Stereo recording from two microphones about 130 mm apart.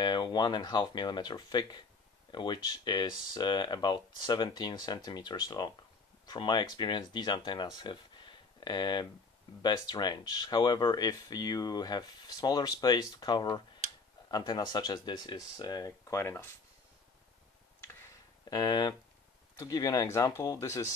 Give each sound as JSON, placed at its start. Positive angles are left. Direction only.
{"t": 0.0, "sound": "speech", "side_deg": 35}
{"t": 18.5, "sound": "speech", "side_deg": 30}